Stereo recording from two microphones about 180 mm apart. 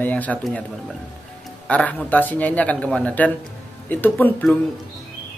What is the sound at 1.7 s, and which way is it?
Speech, 10° left (ahead or behind).